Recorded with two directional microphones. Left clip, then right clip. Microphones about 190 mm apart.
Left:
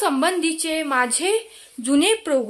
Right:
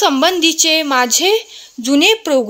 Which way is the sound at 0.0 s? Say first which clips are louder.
Right 8 dB; 35° right (ahead or behind).